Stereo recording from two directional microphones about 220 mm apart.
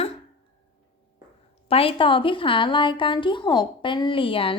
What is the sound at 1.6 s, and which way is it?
A woman's voice, 25° left (ahead or behind).